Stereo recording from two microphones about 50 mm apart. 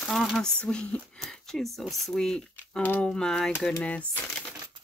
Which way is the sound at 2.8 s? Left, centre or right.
Left.